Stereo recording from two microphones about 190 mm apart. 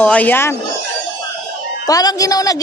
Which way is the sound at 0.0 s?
10° left (ahead or behind).